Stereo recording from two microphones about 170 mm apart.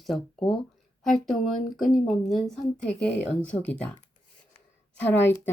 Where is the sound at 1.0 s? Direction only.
Centre (ahead or behind).